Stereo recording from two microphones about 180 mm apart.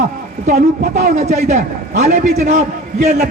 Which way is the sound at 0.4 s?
45° right (ahead or behind).